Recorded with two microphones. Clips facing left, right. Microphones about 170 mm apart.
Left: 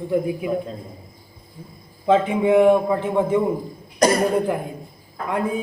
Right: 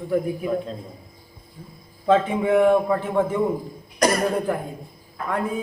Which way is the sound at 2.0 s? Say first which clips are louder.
Left 2 dB; 15° left (ahead or behind).